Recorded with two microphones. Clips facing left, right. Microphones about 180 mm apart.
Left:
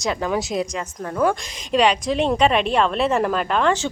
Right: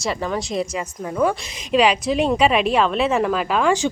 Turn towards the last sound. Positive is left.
turn(degrees=-15)  # may be behind; listen again after turning